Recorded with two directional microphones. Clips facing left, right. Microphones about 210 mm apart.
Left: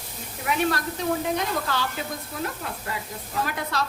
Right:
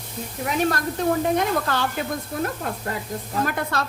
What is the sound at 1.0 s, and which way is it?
Speech, 50° right (ahead or behind).